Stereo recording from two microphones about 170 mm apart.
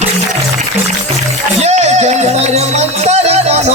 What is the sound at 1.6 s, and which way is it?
Music, 40° right (ahead or behind).